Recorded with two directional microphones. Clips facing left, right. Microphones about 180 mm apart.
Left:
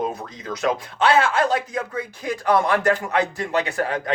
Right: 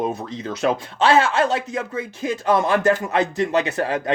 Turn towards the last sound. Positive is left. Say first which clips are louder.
# right 2 dB
turn(degrees=-25)  # may be behind; listen again after turning